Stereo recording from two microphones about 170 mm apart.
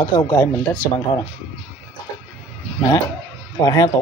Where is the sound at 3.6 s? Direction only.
20° left (ahead or behind).